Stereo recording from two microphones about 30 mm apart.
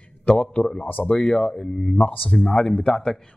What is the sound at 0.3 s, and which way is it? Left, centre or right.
Speech, left.